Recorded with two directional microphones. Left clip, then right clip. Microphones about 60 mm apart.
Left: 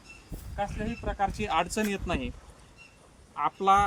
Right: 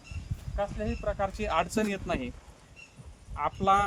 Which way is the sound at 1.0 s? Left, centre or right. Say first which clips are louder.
Left 1 dB; right.